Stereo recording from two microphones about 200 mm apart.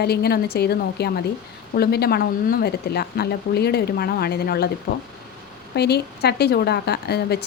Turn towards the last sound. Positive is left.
turn(degrees=55)  # may be behind; listen again after turning